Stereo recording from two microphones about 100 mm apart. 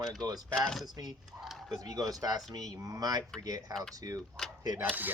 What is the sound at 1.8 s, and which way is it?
Speech, 40° right (ahead or behind).